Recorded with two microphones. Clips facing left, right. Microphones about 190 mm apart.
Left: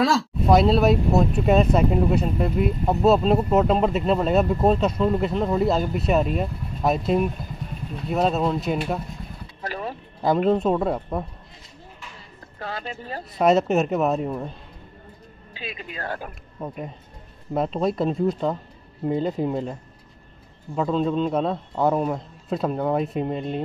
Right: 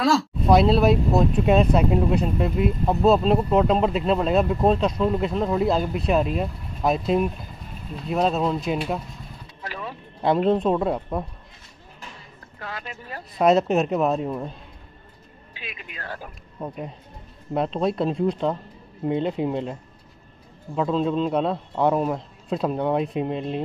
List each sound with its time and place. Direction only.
0.0 s speech: centre (ahead or behind)
9.6 s vehicle: 40° left (ahead or behind)
10.2 s speech: centre (ahead or behind)
12.5 s speech: 30° left (ahead or behind)
13.4 s speech: centre (ahead or behind)
15.5 s speech: 30° left (ahead or behind)
17.6 s speech: centre (ahead or behind)